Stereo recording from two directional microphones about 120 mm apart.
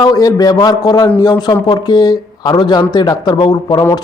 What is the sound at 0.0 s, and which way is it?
Speech, 30° left (ahead or behind).